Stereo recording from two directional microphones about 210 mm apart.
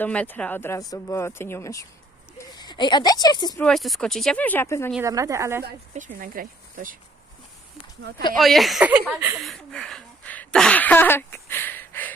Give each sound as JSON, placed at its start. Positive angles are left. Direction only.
{"t": 0.0, "sound": "speech", "side_deg": 5}
{"t": 3.6, "sound": "speech", "side_deg": 0}
{"t": 5.0, "sound": "a woman's voice", "side_deg": -15}
{"t": 5.9, "sound": "speech", "side_deg": -40}
{"t": 8.4, "sound": "a sound", "side_deg": 0}